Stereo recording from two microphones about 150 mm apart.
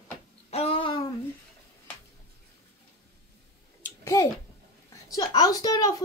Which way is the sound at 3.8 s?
20° left (ahead or behind).